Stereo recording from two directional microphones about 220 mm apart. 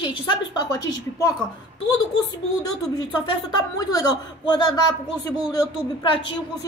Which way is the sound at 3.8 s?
20° left (ahead or behind).